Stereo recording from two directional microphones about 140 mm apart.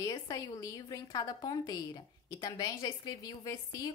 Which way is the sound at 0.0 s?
25° left (ahead or behind).